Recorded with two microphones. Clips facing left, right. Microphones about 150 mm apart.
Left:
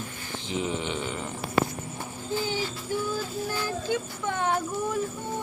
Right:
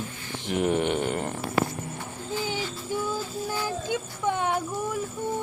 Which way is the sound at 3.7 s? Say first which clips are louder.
Left 1 dB; 15° right (ahead or behind).